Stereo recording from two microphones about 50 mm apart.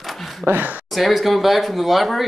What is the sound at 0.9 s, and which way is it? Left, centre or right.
Speech, centre.